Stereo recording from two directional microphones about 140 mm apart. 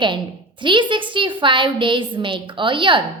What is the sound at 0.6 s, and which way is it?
A woman's voice, 35° right (ahead or behind).